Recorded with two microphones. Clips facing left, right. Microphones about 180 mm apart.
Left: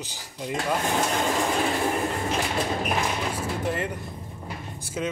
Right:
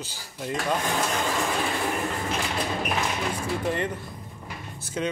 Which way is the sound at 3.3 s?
5° left (ahead or behind).